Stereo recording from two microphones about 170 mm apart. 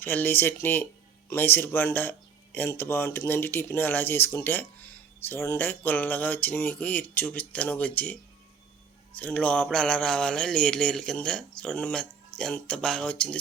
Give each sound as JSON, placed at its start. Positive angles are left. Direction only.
{"t": 0.0, "sound": "speech", "side_deg": 10}
{"t": 9.1, "sound": "mantra", "side_deg": 10}